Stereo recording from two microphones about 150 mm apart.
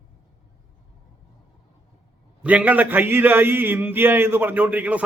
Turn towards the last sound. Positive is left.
turn(degrees=-10)  # may be behind; listen again after turning